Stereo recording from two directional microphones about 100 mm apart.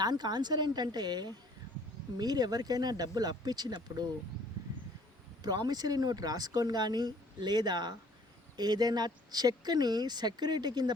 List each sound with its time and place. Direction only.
0.0 s speech: 45° right (ahead or behind)
5.4 s speech: 45° right (ahead or behind)